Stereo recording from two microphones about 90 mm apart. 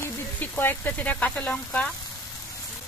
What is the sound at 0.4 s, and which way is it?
Speech, 20° left (ahead or behind).